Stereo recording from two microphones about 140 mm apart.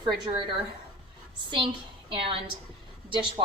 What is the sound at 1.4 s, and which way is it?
A woman's voice, 35° right (ahead or behind).